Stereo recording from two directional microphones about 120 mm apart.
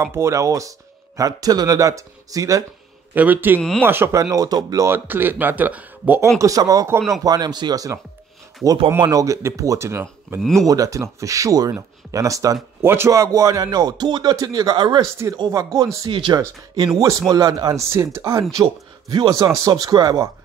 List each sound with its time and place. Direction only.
0.0 s speech: 20° right (ahead or behind)
3.2 s speech: 15° right (ahead or behind); by 4.8 s 35° right (ahead or behind)
4.8 s speech: 20° right (ahead or behind)
6.4 s speech: 30° right (ahead or behind)
9.0 s speech: 30° right (ahead or behind)
10.4 s speech: centre (ahead or behind)
10.7 s speech: 25° right (ahead or behind)
15.2 s speech: 25° right (ahead or behind)
16.1 s speech: 40° right (ahead or behind)